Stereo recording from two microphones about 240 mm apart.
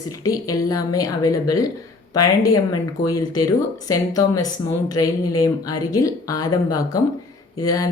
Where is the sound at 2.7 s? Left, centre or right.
Centre.